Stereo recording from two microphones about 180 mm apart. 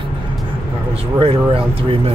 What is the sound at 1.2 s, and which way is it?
Speech, 30° right (ahead or behind).